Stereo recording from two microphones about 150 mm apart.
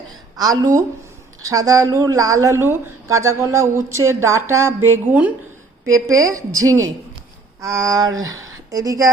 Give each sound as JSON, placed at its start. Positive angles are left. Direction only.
{"t": 0.3, "sound": "a woman's voice", "side_deg": -25}